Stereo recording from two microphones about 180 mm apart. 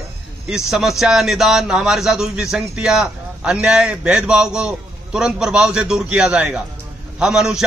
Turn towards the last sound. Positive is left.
turn(degrees=-5)  # may be behind; listen again after turning